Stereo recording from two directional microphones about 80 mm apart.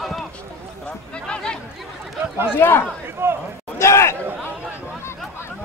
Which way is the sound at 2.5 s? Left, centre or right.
Left.